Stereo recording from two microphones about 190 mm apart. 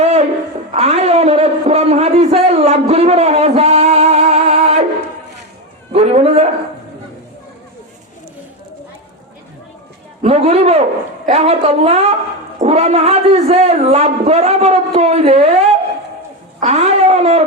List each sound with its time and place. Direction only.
0.0 s a sound: 35° right (ahead or behind)
5.9 s a man's voice: 35° right (ahead or behind)
10.2 s speech: 30° right (ahead or behind)